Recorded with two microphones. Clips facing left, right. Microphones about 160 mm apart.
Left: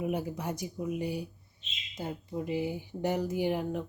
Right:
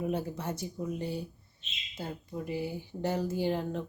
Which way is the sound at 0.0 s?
15° left (ahead or behind).